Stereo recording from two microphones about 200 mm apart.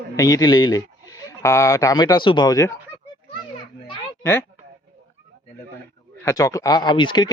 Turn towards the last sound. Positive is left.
turn(degrees=20)  # may be behind; listen again after turning